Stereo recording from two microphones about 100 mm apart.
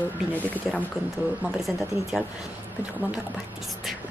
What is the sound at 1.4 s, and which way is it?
Speech, 5° right (ahead or behind).